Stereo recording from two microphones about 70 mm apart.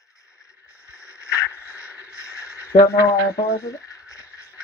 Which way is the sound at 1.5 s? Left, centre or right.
Right.